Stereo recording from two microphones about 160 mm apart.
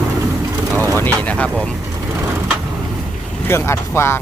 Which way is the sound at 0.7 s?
10° left (ahead or behind).